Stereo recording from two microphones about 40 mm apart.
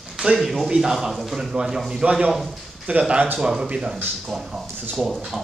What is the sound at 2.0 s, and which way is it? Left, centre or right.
Speech, right.